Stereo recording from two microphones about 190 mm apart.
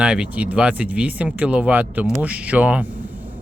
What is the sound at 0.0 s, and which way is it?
Speech, 5° right (ahead or behind).